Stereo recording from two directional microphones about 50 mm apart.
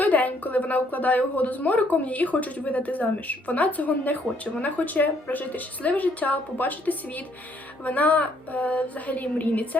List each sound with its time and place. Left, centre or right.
0.0 s a woman's voice: left